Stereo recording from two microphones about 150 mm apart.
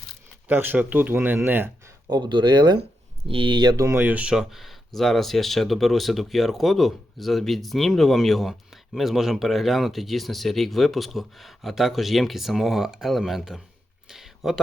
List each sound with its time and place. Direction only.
0.4 s speech: 10° right (ahead or behind)
2.0 s speech: 30° right (ahead or behind); by 13.6 s centre (ahead or behind)
14.1 s a sound: centre (ahead or behind)